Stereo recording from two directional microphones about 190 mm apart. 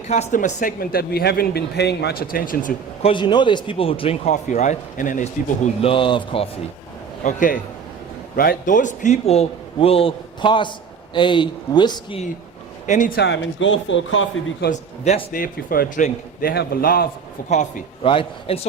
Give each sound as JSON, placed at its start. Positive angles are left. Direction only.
{"t": 0.1, "sound": "speech", "side_deg": 40}
{"t": 3.1, "sound": "a man's voice", "side_deg": 25}
{"t": 5.8, "sound": "speech", "side_deg": 30}
{"t": 7.3, "sound": "a man's voice", "side_deg": 45}
{"t": 12.8, "sound": "a man's voice", "side_deg": 40}
{"t": 13.1, "sound": "speech", "side_deg": 70}
{"t": 14.7, "sound": "speech", "side_deg": 40}
{"t": 17.5, "sound": "a man's voice", "side_deg": 40}